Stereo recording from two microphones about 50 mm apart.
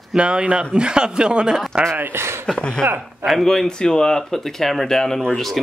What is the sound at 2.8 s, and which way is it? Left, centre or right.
Speech, right.